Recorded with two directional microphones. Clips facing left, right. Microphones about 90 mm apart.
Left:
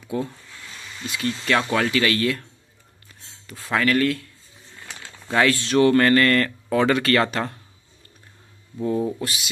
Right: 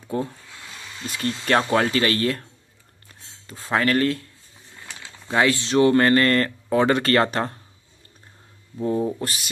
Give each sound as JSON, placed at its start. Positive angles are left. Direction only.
{"t": 0.1, "sound": "speech", "side_deg": -40}
{"t": 3.4, "sound": "speech", "side_deg": -30}
{"t": 5.3, "sound": "speech", "side_deg": -20}
{"t": 9.2, "sound": "speech", "side_deg": -45}